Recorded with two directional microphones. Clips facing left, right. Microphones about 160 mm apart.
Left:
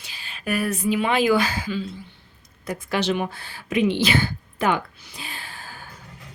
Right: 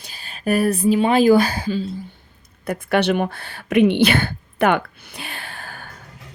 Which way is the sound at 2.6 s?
60° right (ahead or behind).